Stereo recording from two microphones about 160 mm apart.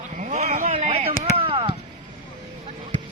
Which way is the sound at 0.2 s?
45° right (ahead or behind).